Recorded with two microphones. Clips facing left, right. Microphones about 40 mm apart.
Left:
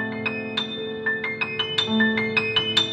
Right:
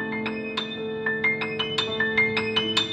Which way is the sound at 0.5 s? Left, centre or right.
Left.